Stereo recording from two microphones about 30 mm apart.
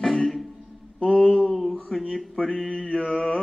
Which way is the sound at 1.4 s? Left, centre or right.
Centre.